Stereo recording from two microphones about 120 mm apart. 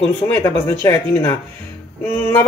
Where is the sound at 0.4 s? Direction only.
25° left (ahead or behind).